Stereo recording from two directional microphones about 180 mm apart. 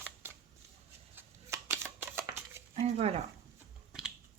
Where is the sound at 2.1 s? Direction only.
15° right (ahead or behind).